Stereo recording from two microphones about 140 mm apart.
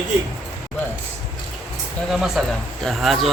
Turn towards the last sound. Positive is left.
turn(degrees=0)  # may be behind; listen again after turning